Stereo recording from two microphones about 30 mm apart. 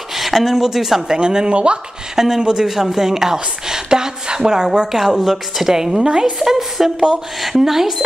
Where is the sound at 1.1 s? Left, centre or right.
Right.